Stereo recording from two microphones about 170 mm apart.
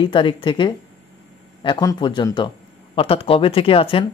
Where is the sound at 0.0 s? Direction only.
30° left (ahead or behind).